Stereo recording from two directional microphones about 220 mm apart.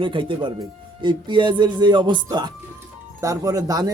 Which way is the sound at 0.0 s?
25° right (ahead or behind).